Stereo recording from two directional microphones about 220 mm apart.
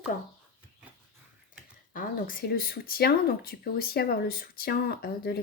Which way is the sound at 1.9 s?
40° left (ahead or behind).